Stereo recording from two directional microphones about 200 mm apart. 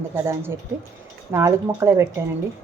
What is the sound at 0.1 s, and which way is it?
Speech, 10° right (ahead or behind).